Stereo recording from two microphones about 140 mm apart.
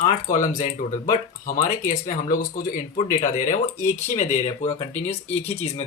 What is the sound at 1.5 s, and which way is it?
Speech, 70° left (ahead or behind).